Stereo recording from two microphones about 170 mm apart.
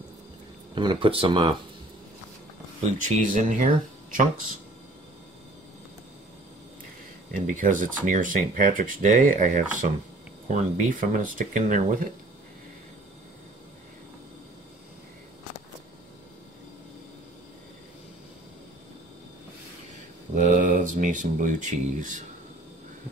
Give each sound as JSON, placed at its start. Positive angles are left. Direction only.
{"t": 0.7, "sound": "speech", "side_deg": -30}
{"t": 2.8, "sound": "speech", "side_deg": -45}
{"t": 7.3, "sound": "speech", "side_deg": -50}
{"t": 20.3, "sound": "speech", "side_deg": -50}